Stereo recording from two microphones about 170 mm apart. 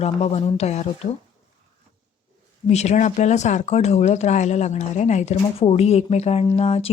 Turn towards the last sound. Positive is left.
turn(degrees=40)  # may be behind; listen again after turning